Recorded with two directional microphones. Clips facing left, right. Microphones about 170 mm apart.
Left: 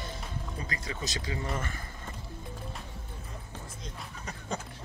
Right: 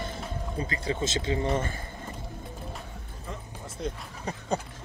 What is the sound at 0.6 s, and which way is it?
Speech, 30° right (ahead or behind).